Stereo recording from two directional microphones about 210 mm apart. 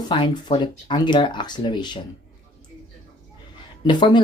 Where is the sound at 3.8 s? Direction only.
20° left (ahead or behind).